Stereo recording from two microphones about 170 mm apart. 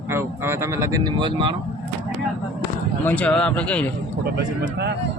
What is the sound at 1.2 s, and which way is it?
Speech, 25° right (ahead or behind).